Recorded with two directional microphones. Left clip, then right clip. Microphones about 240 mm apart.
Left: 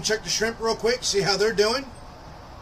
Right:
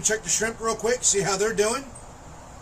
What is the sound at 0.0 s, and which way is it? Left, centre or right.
Speech, centre.